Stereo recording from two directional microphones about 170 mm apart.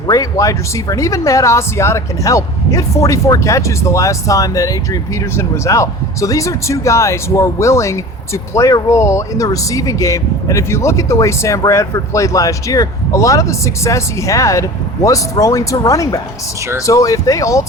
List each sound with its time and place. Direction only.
0.1 s speech: 20° left (ahead or behind)